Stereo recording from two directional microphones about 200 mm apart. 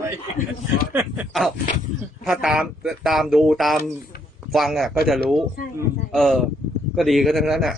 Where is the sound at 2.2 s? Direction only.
Centre (ahead or behind).